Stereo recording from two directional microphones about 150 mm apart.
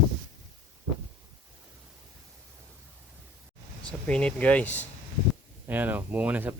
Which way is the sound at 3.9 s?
5° left (ahead or behind).